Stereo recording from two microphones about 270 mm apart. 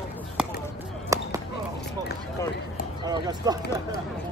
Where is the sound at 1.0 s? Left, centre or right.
Centre.